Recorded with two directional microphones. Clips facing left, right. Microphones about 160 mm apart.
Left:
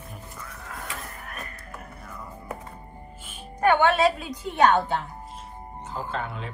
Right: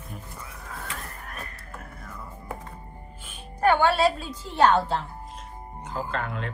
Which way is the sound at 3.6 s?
20° left (ahead or behind).